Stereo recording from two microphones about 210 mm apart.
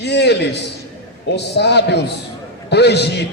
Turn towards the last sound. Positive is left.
turn(degrees=50)  # may be behind; listen again after turning